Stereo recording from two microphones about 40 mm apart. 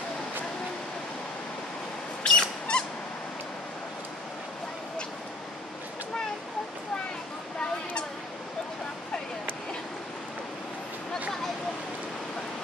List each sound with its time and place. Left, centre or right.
2.2 s rodents: left